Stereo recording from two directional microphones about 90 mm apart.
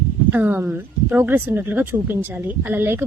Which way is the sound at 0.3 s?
20° right (ahead or behind).